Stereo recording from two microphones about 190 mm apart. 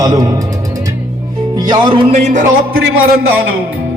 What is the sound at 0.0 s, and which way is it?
Speech, 20° right (ahead or behind).